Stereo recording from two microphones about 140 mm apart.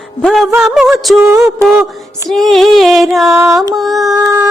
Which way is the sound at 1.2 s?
20° right (ahead or behind).